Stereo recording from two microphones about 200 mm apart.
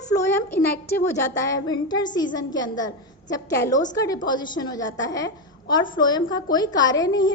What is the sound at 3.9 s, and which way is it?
A child's voice, 15° left (ahead or behind).